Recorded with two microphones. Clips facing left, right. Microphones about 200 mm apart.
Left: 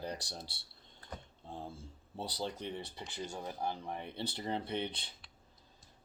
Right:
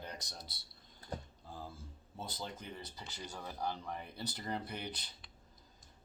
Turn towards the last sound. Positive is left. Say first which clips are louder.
# left 6 dB
turn(degrees=25)  # may be behind; listen again after turning